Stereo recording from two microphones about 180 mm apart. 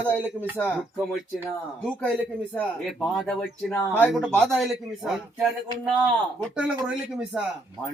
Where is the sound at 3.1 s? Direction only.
5° left (ahead or behind).